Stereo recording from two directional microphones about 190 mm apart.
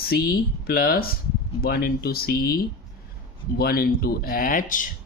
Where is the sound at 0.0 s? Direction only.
55° left (ahead or behind).